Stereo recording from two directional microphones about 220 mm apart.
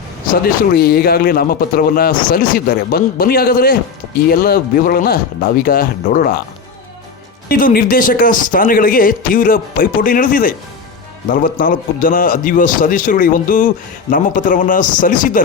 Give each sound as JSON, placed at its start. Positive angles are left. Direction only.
{"t": 0.3, "sound": "a man's voice", "side_deg": 45}
{"t": 7.4, "sound": "speech", "side_deg": 40}